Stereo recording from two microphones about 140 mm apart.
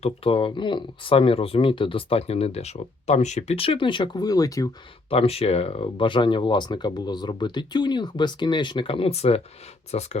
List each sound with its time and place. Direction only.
0.0 s speech: 40° left (ahead or behind); by 4.7 s 25° left (ahead or behind)
5.1 s speech: 45° left (ahead or behind)